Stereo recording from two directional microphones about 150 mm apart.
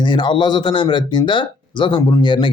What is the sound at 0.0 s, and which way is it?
Speech, 30° left (ahead or behind).